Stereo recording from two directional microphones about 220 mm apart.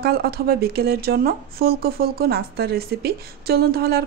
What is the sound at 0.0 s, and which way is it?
A woman's voice, 45° right (ahead or behind).